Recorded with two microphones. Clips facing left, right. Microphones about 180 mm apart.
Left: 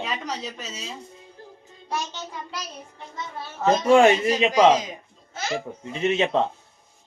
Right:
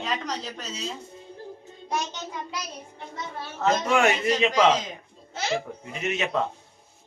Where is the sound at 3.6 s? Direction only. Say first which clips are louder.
Left 6 dB; 30° left (ahead or behind).